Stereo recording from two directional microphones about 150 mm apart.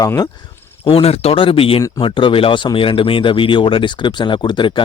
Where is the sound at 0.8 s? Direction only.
40° left (ahead or behind).